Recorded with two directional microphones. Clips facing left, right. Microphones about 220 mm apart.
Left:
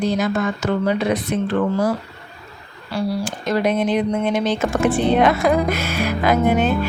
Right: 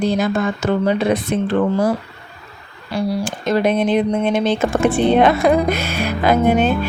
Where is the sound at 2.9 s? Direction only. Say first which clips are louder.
Right 2 dB; 25° right (ahead or behind).